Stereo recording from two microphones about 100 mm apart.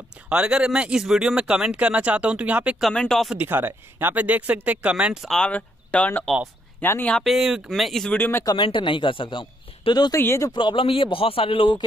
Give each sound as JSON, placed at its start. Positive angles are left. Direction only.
{"t": 0.3, "sound": "speech", "side_deg": -10}
{"t": 2.8, "sound": "speech", "side_deg": 5}
{"t": 3.3, "sound": "speech", "side_deg": -20}
{"t": 5.3, "sound": "speech", "side_deg": 10}
{"t": 7.2, "sound": "speech", "side_deg": 0}
{"t": 8.1, "sound": "speech", "side_deg": 20}
{"t": 8.5, "sound": "a man's voice", "side_deg": 55}
{"t": 10.1, "sound": "speech", "side_deg": 30}
{"t": 10.5, "sound": "a man's voice", "side_deg": 50}